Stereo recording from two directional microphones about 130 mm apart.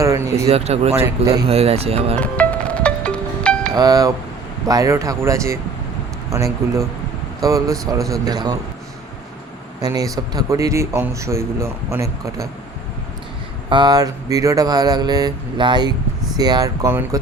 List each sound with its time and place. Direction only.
0.0 s speech: 20° right (ahead or behind)
0.4 s speech: 55° right (ahead or behind)
2.2 s music: 10° left (ahead or behind)
3.8 s speech: 30° right (ahead or behind)
9.8 s speech: 30° right (ahead or behind)
13.7 s a sound: 35° right (ahead or behind)
16.4 s speech: 30° right (ahead or behind)